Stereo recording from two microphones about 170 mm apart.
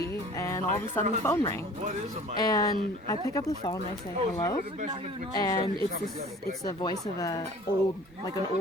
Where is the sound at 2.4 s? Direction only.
25° left (ahead or behind).